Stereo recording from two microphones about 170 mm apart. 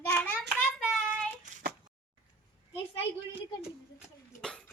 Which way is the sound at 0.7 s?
5° right (ahead or behind).